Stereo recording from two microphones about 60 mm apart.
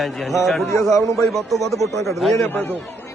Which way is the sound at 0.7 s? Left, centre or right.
Left.